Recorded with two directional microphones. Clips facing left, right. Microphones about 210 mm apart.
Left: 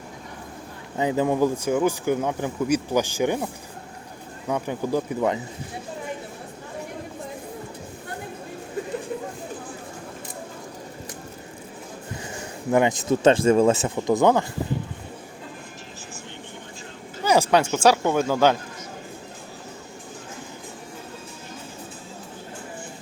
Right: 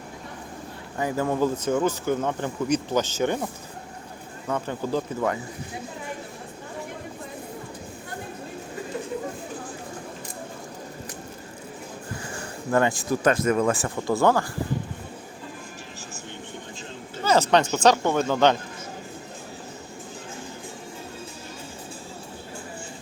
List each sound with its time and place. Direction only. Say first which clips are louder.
0.9 s speech: left 3 dB; 20° left (ahead or behind)
12.7 s speech: left 2 dB; 20° left (ahead or behind)
17.2 s speech: left 1 dB; 10° left (ahead or behind)